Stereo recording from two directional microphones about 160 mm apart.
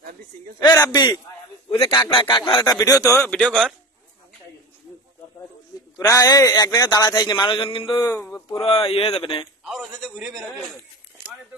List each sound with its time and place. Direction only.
0.7 s a man's voice: 20° left (ahead or behind)
3.3 s a man's voice: 5° left (ahead or behind)
5.9 s a man's voice: 20° left (ahead or behind)
8.2 s a sound: 10° left (ahead or behind)
8.5 s speech: 35° left (ahead or behind)
9.7 s a man's voice: centre (ahead or behind)